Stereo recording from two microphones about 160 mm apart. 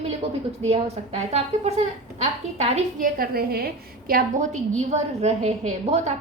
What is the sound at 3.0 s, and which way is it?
A woman's voice, 65° right (ahead or behind).